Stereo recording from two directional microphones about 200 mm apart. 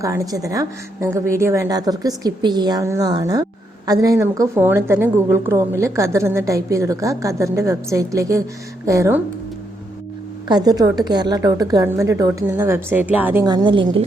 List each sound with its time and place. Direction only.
0.0 s a woman's voice: 15° right (ahead or behind)
10.5 s a woman's voice: 20° right (ahead or behind)